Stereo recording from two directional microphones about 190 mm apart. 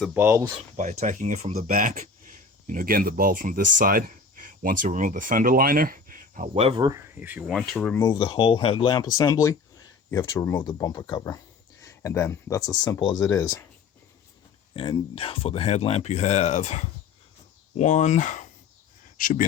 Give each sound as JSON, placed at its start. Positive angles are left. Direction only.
{"t": 0.1, "sound": "speech", "side_deg": -10}
{"t": 0.8, "sound": "speech", "side_deg": -40}
{"t": 6.5, "sound": "speech", "side_deg": -30}
{"t": 7.2, "sound": "speech", "side_deg": -10}
{"t": 8.0, "sound": "speech", "side_deg": 25}
{"t": 14.7, "sound": "speech", "side_deg": 25}